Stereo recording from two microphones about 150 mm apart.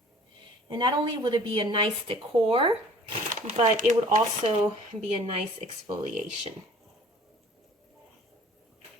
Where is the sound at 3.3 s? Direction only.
55° right (ahead or behind).